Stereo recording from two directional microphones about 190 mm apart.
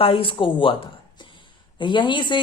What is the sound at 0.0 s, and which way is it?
A woman's voice, 30° left (ahead or behind).